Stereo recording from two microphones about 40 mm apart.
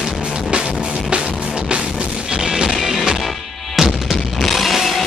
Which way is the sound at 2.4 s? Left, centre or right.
Centre.